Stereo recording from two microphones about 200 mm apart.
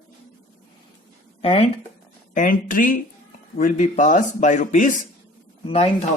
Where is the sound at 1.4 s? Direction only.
30° left (ahead or behind).